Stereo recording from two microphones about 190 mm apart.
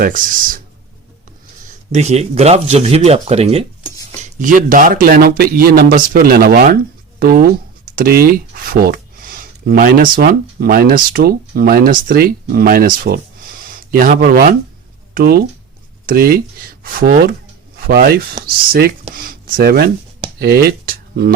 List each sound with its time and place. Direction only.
0.0 s speech: 45° right (ahead or behind)
1.9 s speech: 35° right (ahead or behind)
4.2 s speech: 45° right (ahead or behind)